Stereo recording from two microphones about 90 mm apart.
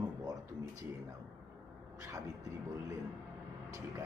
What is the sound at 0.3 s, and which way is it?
Speech, 40° right (ahead or behind).